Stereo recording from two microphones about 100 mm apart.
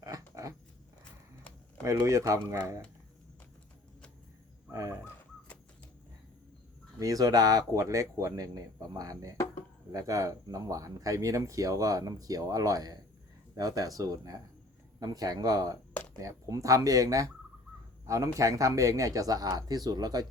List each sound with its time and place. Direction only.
0.0 s a sound: 35° right (ahead or behind)
1.8 s speech: 35° right (ahead or behind)
4.7 s speech: 35° right (ahead or behind)
7.0 s speech: 35° right (ahead or behind)